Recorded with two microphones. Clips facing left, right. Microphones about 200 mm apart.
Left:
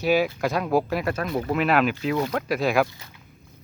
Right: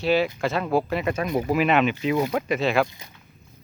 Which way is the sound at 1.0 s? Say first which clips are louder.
Right 2 dB; 10° right (ahead or behind).